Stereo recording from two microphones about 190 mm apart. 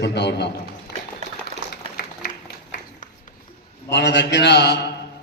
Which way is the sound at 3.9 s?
65° left (ahead or behind).